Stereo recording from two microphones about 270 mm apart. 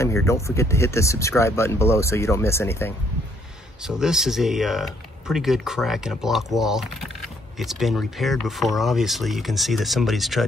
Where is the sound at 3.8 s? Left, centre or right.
Centre.